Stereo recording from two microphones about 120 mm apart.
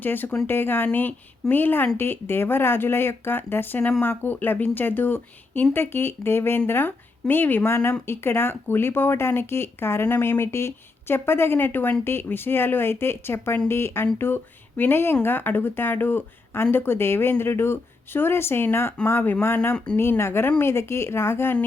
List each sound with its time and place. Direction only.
0.0 s speech: 15° left (ahead or behind)